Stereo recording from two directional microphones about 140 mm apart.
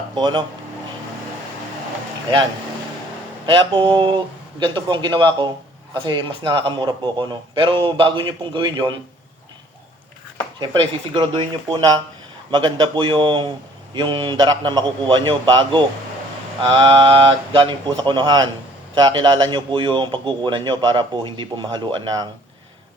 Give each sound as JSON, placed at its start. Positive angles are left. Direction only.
{"t": 0.2, "sound": "a man's voice", "side_deg": -30}
{"t": 3.4, "sound": "a man's voice", "side_deg": -35}
{"t": 10.6, "sound": "a man's voice", "side_deg": -30}